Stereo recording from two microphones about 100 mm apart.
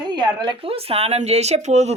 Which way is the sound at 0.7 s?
75° right (ahead or behind).